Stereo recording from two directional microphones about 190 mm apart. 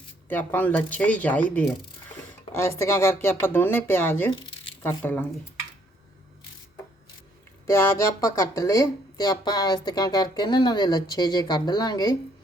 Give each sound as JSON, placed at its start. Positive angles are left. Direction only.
{"t": 0.3, "sound": "speech", "side_deg": 10}
{"t": 7.7, "sound": "speech", "side_deg": 15}